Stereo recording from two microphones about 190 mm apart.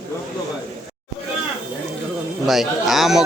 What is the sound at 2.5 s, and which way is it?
Speech, centre (ahead or behind).